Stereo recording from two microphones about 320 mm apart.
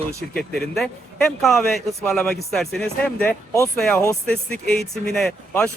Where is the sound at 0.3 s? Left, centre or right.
Centre.